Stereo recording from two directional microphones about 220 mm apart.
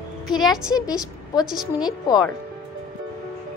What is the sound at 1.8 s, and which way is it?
Speech, 20° left (ahead or behind).